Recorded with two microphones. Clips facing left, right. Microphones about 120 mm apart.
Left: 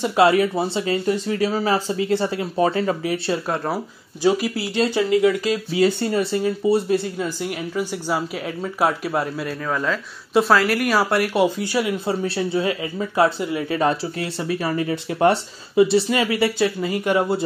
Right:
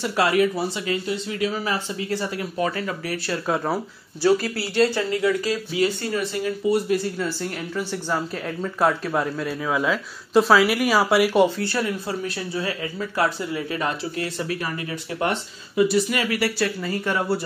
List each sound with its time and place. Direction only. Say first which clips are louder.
0.0 s speech: left 4 dB; 25° left (ahead or behind)
1.0 s speech: left 5 dB; 45° left (ahead or behind)
3.4 s speech: even; centre (ahead or behind)
4.2 s speech: left 1 dB; 15° left (ahead or behind)
5.9 s speech: left 5 dB; 30° left (ahead or behind)
7.2 s speech: left 2 dB; 15° left (ahead or behind); by 11.4 s centre (ahead or behind)
11.4 s speech: left 2 dB; 15° left (ahead or behind)
12.1 s speech: left 6 dB; 25° left (ahead or behind)